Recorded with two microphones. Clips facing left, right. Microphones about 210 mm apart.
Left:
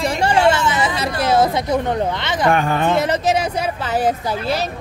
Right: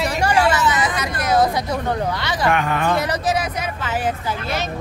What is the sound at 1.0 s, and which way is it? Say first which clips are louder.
Speech: left 3 dB; 30° left (ahead or behind).